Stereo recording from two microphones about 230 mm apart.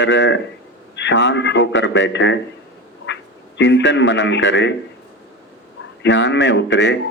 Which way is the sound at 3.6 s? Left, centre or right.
Left.